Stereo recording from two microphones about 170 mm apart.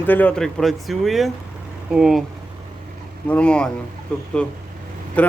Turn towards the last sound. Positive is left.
turn(degrees=10)  # may be behind; listen again after turning